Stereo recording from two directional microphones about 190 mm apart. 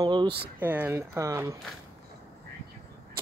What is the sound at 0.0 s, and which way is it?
Speech, 25° right (ahead or behind).